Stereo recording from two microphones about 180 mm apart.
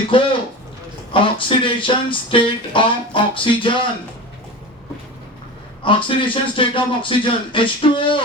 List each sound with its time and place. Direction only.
0.1 s speech: 30° left (ahead or behind)
5.8 s speech: 30° left (ahead or behind)